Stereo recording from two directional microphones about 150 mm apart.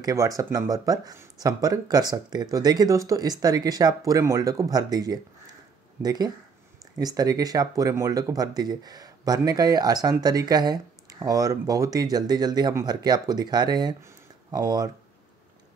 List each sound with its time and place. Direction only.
0.0 s speech: 20° right (ahead or behind)